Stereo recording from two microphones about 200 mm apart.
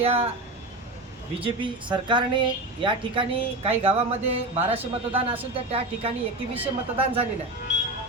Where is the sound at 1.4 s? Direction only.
25° right (ahead or behind).